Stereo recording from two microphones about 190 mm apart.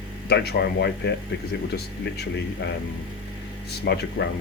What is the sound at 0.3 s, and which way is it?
Speech, 60° left (ahead or behind).